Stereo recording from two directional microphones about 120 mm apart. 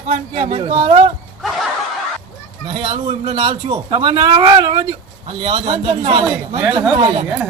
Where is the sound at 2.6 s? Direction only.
40° right (ahead or behind).